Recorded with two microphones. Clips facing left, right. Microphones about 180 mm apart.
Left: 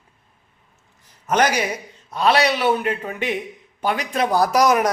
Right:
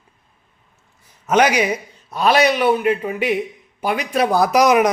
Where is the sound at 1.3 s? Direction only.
10° right (ahead or behind).